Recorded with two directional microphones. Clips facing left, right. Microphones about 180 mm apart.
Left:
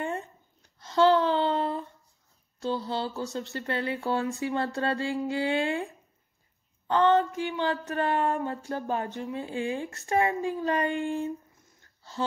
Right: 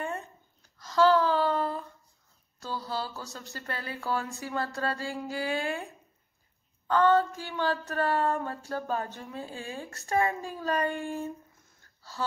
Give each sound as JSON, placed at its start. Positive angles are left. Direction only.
{"t": 0.7, "sound": "a sound", "side_deg": 25}
{"t": 2.6, "sound": "speech", "side_deg": 25}
{"t": 6.9, "sound": "speech", "side_deg": 20}